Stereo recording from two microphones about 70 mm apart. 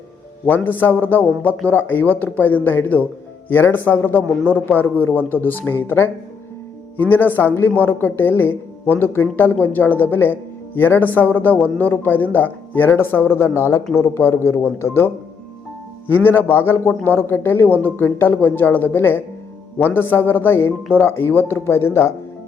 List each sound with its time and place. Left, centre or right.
0.4 s a man's voice: left